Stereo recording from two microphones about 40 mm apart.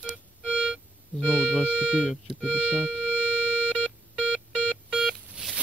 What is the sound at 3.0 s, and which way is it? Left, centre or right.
Music, right.